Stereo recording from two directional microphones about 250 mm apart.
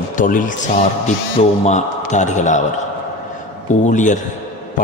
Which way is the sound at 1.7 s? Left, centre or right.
Left.